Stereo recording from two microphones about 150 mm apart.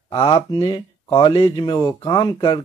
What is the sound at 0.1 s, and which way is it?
Speech, 35° left (ahead or behind).